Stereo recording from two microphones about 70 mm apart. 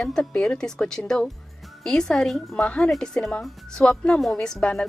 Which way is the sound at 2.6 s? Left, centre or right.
Centre.